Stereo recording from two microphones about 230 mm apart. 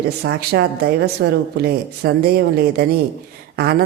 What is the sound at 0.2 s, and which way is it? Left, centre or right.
Speech, right.